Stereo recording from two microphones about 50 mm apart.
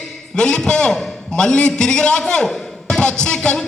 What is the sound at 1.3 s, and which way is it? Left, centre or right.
Music, centre.